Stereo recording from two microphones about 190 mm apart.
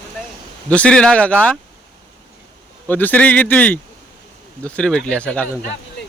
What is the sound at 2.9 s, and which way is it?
Speech, 10° left (ahead or behind).